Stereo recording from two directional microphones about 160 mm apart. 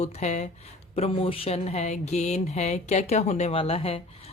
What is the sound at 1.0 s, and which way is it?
Speech, 35° left (ahead or behind).